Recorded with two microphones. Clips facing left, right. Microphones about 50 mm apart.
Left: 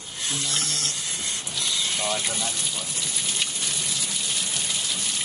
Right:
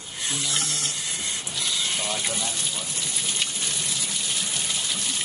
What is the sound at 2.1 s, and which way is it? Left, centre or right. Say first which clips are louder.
Water: left 1 dB; centre.